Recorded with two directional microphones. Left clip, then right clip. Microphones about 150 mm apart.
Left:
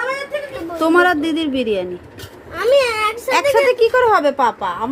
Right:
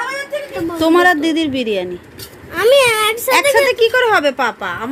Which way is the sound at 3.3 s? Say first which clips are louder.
Right 1 dB; centre (ahead or behind).